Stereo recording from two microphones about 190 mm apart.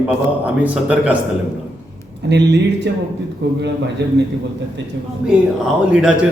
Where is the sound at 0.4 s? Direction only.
5° right (ahead or behind).